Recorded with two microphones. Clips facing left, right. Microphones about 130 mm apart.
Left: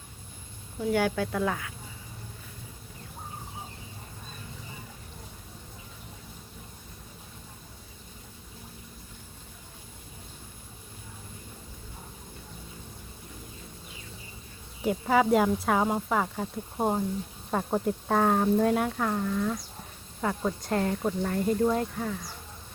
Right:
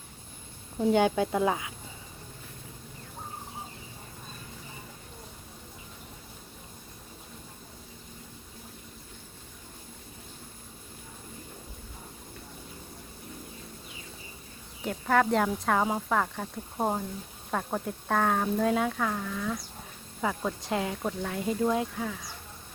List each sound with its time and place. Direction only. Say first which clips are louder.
0.8 s speech: right 3 dB; 20° right (ahead or behind)
14.8 s speech: left 2 dB; 10° left (ahead or behind)